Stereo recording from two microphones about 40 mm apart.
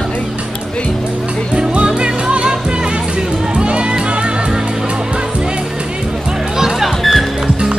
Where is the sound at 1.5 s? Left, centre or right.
Right.